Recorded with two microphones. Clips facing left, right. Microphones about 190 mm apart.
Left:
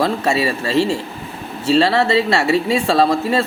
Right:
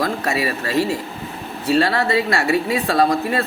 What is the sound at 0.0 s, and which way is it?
Speech, 25° left (ahead or behind).